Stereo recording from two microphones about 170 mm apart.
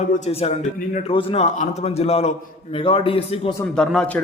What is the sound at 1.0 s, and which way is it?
A man's voice, 30° left (ahead or behind).